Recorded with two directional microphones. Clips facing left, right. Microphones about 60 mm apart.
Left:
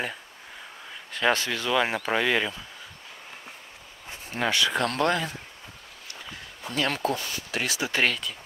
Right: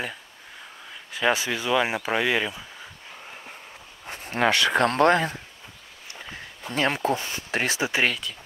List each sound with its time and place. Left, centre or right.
1.1 s speech: centre
4.1 s speech: right
4.8 s speech: right
6.7 s speech: right
7.9 s speech: centre